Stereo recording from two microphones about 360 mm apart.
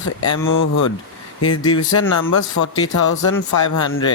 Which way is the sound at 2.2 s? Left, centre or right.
Left.